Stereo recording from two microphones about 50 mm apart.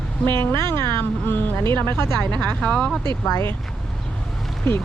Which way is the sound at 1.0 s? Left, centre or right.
Left.